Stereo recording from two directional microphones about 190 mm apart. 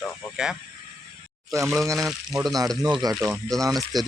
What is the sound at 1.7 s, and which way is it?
Speech, 15° right (ahead or behind).